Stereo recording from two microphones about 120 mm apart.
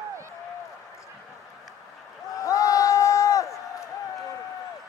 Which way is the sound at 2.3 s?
25° left (ahead or behind).